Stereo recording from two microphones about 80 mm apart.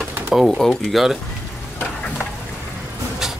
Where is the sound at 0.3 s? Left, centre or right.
Centre.